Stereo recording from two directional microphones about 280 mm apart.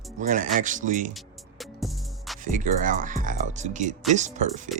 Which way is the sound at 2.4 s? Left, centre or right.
Right.